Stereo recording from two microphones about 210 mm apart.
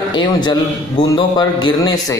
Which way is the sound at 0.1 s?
20° left (ahead or behind).